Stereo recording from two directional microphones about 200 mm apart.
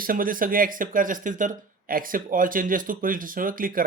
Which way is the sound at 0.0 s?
45° right (ahead or behind).